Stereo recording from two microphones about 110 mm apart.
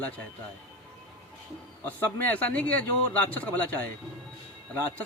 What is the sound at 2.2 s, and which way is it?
Speech, 15° left (ahead or behind).